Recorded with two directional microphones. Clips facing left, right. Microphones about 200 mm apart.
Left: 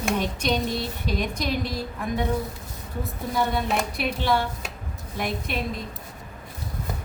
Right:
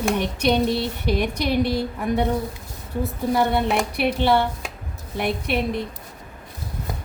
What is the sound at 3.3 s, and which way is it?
A woman's voice, 65° right (ahead or behind).